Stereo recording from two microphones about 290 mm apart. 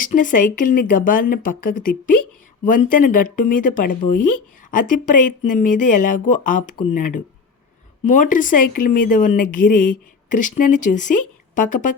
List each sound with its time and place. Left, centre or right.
0.0 s speech: left
8.0 s speech: left